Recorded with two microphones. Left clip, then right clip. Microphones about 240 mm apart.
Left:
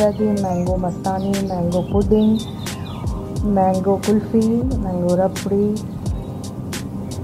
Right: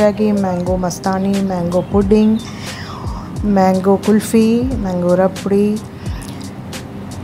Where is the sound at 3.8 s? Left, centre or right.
Right.